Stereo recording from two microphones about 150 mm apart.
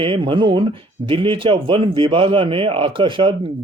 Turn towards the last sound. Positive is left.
turn(degrees=-35)  # may be behind; listen again after turning